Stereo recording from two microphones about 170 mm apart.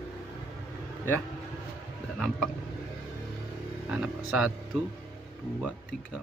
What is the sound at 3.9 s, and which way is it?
Speech, 5° right (ahead or behind).